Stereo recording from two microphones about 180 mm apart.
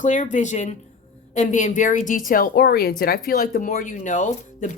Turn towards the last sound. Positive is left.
turn(degrees=40)  # may be behind; listen again after turning